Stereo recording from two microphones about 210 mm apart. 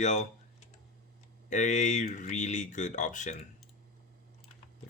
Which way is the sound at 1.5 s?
35° left (ahead or behind).